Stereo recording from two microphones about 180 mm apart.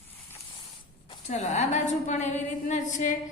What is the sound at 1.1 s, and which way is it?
A woman's voice, 40° left (ahead or behind).